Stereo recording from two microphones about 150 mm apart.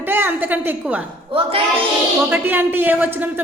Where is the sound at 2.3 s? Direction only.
15° right (ahead or behind).